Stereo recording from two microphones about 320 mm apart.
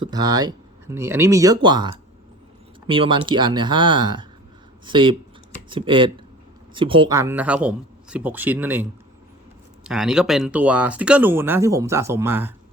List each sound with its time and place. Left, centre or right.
0.0 s speech: centre